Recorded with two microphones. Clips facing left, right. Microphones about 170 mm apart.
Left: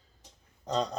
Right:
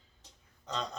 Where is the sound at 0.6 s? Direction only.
35° left (ahead or behind).